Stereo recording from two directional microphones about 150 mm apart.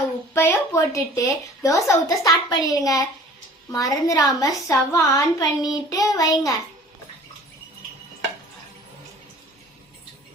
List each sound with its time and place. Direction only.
0.3 s a woman's voice: 20° left (ahead or behind)